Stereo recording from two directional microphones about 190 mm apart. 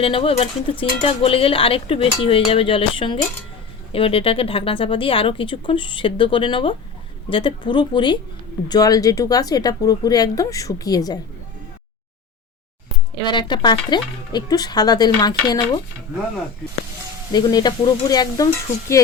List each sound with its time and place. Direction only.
0.0 s speech: 30° left (ahead or behind)
13.2 s speech: 25° left (ahead or behind)
17.3 s speech: 20° left (ahead or behind)